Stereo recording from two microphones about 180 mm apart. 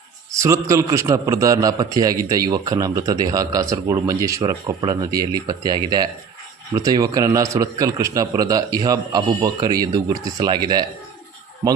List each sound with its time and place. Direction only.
0.3 s a man's voice: 15° right (ahead or behind)